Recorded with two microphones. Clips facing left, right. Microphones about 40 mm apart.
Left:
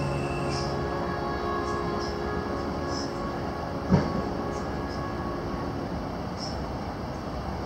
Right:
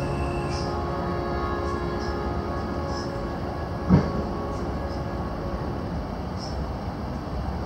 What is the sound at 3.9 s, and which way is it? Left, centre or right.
Train, centre.